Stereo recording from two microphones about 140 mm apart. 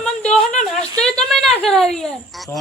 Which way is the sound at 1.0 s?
5° left (ahead or behind).